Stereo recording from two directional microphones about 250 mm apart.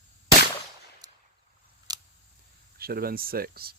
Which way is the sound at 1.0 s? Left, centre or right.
Centre.